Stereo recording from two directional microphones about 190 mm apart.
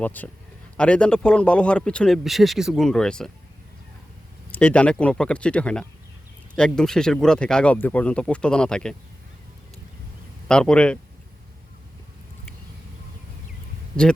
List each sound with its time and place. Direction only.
0.0 s a man's voice: 10° left (ahead or behind)
4.5 s speech: 5° left (ahead or behind)
10.5 s speech: 5° left (ahead or behind)